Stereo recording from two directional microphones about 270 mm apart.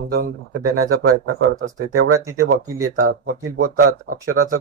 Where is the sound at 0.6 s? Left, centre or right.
Right.